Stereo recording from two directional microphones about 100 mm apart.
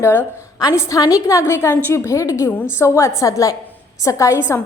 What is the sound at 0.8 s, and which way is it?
A woman's voice, 35° left (ahead or behind).